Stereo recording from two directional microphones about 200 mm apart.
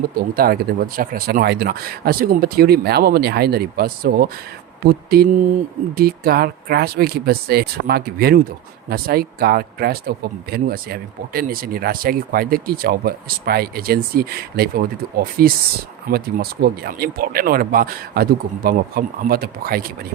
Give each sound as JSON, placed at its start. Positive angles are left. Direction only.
{"t": 0.1, "sound": "speech", "side_deg": -50}